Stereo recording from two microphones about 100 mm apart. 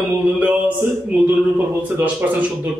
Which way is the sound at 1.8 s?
15° right (ahead or behind).